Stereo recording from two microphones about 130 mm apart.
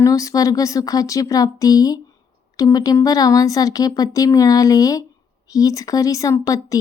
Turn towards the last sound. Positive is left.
turn(degrees=25)  # may be behind; listen again after turning